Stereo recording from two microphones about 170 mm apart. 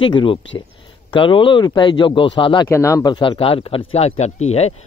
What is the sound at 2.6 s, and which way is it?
Speech, 15° left (ahead or behind).